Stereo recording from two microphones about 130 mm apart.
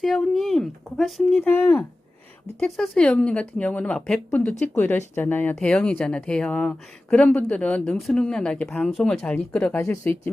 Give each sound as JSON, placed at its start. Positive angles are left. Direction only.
{"t": 0.0, "sound": "speech", "side_deg": 0}
{"t": 1.5, "sound": "speech", "side_deg": 15}
{"t": 2.6, "sound": "speech", "side_deg": 5}
{"t": 9.8, "sound": "speech", "side_deg": 20}